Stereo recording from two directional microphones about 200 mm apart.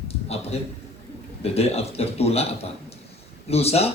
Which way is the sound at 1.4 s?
30° left (ahead or behind).